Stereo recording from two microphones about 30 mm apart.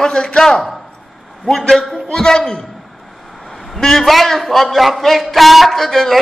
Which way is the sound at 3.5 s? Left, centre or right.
Centre.